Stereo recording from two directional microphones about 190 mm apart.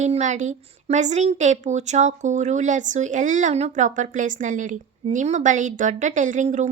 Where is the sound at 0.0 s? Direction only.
40° right (ahead or behind).